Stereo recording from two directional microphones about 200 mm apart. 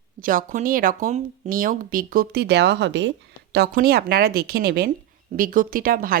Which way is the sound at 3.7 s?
45° right (ahead or behind).